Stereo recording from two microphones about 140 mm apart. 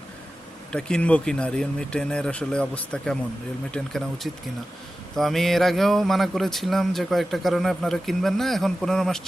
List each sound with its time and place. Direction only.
0.7 s a man's voice: 5° left (ahead or behind)